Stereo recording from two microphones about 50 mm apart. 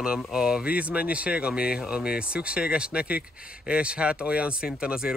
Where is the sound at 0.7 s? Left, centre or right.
Right.